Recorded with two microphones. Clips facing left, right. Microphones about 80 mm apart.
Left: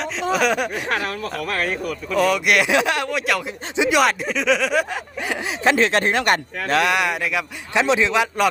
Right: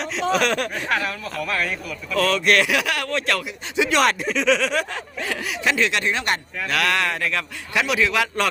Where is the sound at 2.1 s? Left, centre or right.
Centre.